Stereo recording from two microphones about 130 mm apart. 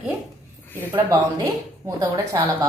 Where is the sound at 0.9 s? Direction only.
25° right (ahead or behind).